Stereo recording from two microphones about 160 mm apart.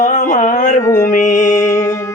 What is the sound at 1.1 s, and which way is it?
Music, 50° left (ahead or behind).